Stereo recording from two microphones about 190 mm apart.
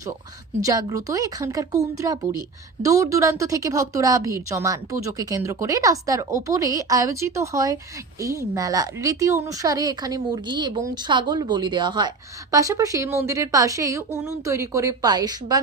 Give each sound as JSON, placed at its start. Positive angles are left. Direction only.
{"t": 0.6, "sound": "a woman's voice", "side_deg": -20}